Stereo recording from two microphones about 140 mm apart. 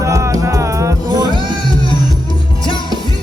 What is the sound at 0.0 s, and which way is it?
Music, 20° right (ahead or behind).